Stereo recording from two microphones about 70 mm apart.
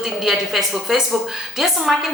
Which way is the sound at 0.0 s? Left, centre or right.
Centre.